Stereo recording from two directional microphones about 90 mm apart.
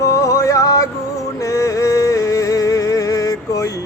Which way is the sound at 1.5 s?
40° left (ahead or behind).